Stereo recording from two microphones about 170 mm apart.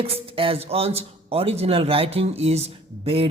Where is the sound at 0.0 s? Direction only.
35° right (ahead or behind).